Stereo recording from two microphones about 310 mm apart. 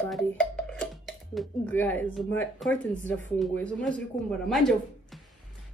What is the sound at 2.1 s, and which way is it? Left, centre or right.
A woman's voice, centre.